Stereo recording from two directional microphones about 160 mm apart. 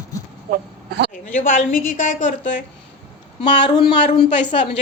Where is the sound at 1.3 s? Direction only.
55° left (ahead or behind).